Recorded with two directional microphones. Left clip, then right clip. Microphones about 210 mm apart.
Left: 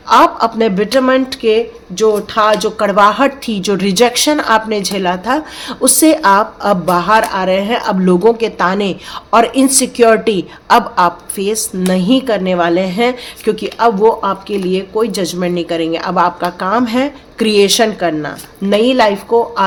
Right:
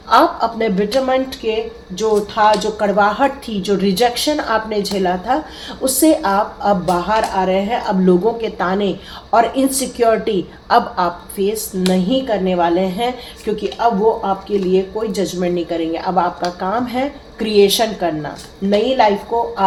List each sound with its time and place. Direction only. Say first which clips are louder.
0.1 s speech: left 4 dB; 40° left (ahead or behind)